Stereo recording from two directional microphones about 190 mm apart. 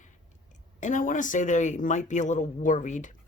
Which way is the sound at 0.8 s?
40° left (ahead or behind).